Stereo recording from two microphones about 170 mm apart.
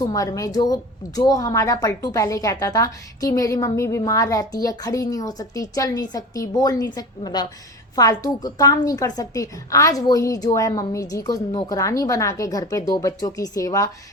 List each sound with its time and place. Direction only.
0.0 s a woman's voice: 20° left (ahead or behind)